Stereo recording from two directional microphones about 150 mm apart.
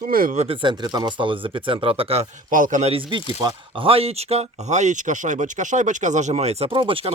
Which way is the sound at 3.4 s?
35° right (ahead or behind).